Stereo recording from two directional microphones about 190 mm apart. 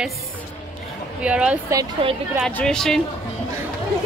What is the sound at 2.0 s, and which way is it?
Speech, 30° right (ahead or behind).